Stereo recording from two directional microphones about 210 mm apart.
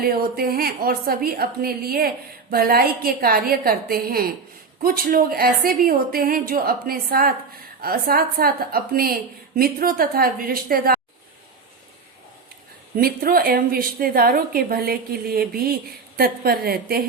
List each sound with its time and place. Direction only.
0.0 s a woman's voice: 45° right (ahead or behind)
13.0 s a woman's voice: 45° right (ahead or behind)